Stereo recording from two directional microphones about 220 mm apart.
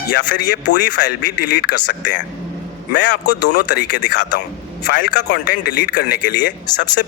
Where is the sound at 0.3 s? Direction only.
45° left (ahead or behind).